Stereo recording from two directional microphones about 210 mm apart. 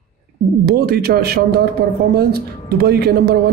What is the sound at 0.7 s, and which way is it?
A man's voice, 50° right (ahead or behind).